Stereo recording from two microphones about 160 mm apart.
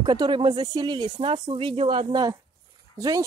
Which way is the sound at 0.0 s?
30° right (ahead or behind).